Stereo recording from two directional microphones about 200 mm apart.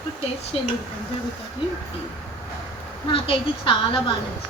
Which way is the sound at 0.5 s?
30° left (ahead or behind).